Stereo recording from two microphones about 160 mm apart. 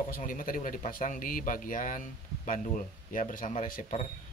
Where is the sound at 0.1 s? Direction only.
60° left (ahead or behind).